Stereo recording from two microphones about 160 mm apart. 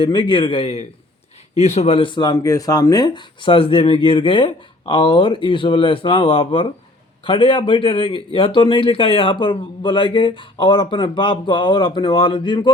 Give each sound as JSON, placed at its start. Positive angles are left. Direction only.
{"t": 0.0, "sound": "speech", "side_deg": 35}